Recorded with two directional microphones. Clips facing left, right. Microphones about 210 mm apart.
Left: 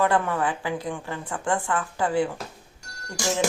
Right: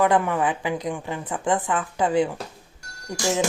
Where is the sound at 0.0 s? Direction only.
15° right (ahead or behind).